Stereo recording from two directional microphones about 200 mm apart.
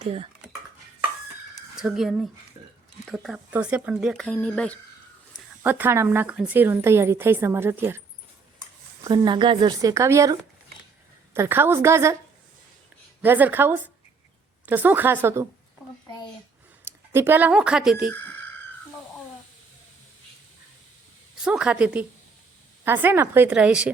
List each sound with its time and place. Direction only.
0.0 s speech: 30° right (ahead or behind)
1.7 s speech: centre (ahead or behind)
5.6 s a woman's voice: 10° right (ahead or behind)
9.0 s speech: 25° right (ahead or behind)
11.3 s a woman's voice: 10° right (ahead or behind)
13.2 s a woman's voice: 10° right (ahead or behind)
16.8 s speech: 10° right (ahead or behind)
21.4 s a woman's voice: 5° right (ahead or behind)